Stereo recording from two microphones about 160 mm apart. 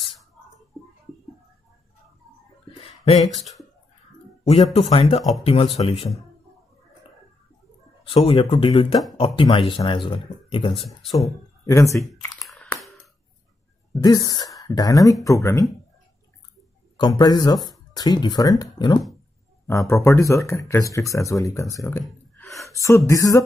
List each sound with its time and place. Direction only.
2.8 s a sound: 40° left (ahead or behind)
3.3 s speech: centre (ahead or behind)
4.7 s speech: 35° left (ahead or behind)
8.0 s speech: 35° left (ahead or behind)
10.9 s speech: 20° left (ahead or behind)
12.4 s a sound: centre (ahead or behind)
14.0 s speech: 25° left (ahead or behind)
16.9 s speech: 25° left (ahead or behind)
22.4 s a sound: 20° left (ahead or behind)
22.8 s speech: 20° left (ahead or behind)